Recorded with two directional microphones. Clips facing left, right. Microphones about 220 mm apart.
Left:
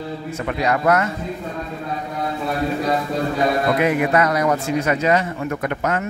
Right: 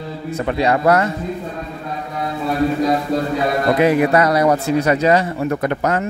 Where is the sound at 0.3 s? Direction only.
35° right (ahead or behind).